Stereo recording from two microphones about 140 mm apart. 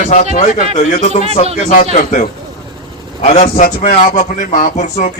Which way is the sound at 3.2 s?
60° left (ahead or behind).